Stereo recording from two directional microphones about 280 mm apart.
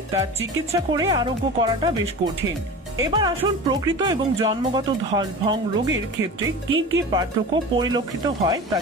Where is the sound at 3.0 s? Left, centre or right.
Centre.